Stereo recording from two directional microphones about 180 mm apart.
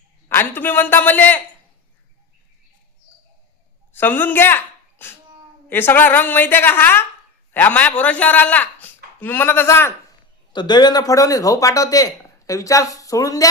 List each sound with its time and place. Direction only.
0.3 s speech: 10° left (ahead or behind)
3.9 s a woman's voice: 10° left (ahead or behind)
10.5 s speech: 25° left (ahead or behind)